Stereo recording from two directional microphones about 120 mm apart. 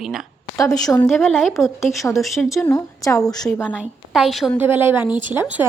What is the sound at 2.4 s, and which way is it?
A woman's voice, 10° left (ahead or behind).